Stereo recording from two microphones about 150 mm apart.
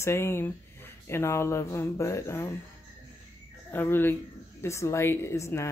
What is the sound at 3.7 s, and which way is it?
A woman's voice, 15° left (ahead or behind).